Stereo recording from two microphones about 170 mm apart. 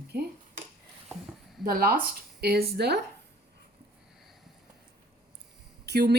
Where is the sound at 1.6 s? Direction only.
60° right (ahead or behind).